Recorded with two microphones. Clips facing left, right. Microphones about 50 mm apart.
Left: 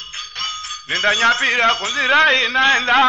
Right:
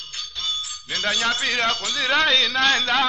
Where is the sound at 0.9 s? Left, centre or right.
Left.